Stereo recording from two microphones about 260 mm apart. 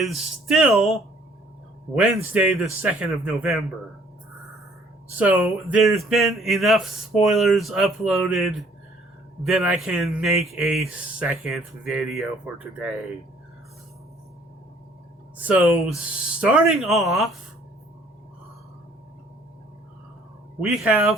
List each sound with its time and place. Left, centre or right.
0.0 s speech: centre
5.1 s speech: centre
15.4 s speech: centre
20.6 s speech: centre